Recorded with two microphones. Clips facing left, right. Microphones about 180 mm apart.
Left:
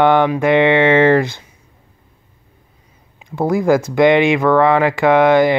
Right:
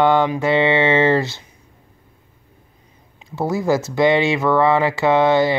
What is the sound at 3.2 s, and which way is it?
Speech, 20° left (ahead or behind).